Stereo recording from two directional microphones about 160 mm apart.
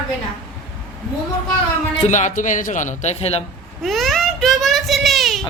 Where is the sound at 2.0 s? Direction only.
50° left (ahead or behind).